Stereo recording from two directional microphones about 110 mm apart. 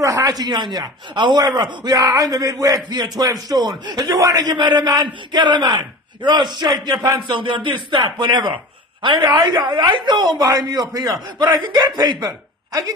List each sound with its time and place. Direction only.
0.0 s speech: 30° right (ahead or behind)